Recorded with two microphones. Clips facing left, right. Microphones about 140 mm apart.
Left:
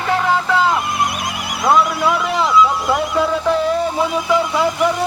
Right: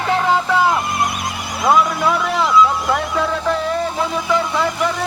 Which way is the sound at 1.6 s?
5° left (ahead or behind).